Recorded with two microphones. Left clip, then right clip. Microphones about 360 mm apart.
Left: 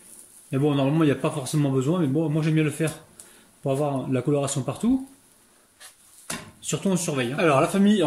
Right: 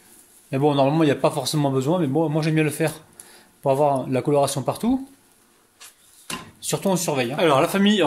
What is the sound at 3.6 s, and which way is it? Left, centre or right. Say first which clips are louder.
Speech: right 7 dB; right.